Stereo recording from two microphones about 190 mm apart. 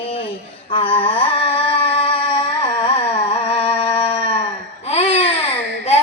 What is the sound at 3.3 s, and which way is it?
Music, 35° left (ahead or behind).